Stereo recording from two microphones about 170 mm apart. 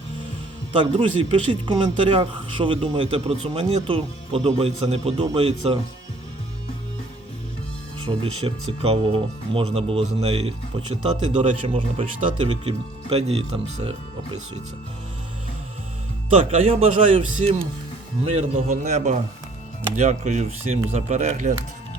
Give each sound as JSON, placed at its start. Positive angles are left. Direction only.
{"t": 0.8, "sound": "a man's voice", "side_deg": -30}
{"t": 8.0, "sound": "a man's voice", "side_deg": -30}
{"t": 16.3, "sound": "a man's voice", "side_deg": -35}